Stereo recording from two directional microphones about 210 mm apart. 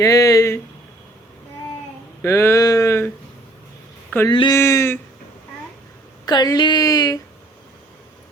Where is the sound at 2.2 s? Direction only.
10° left (ahead or behind).